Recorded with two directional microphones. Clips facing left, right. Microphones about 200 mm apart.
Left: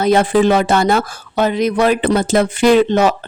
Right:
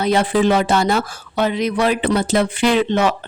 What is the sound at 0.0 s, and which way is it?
Speech, 45° left (ahead or behind).